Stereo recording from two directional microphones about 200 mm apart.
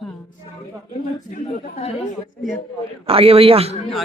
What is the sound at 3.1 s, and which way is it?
Speech, 30° right (ahead or behind).